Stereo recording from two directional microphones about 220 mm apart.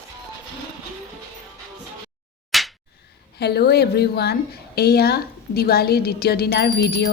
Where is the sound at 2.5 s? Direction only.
Centre (ahead or behind).